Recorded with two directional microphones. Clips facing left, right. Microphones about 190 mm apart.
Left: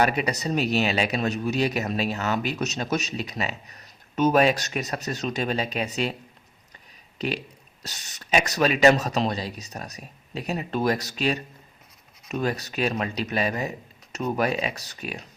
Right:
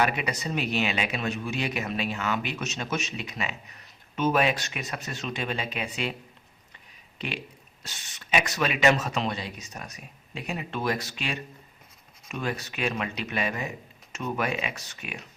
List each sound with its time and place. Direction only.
0.0 s a man's voice: 40° left (ahead or behind)
7.2 s a man's voice: 40° left (ahead or behind)